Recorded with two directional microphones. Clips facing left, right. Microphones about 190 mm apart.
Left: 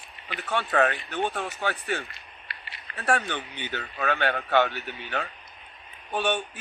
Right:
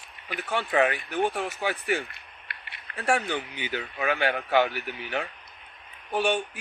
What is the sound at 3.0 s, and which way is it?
A man's voice, 10° right (ahead or behind).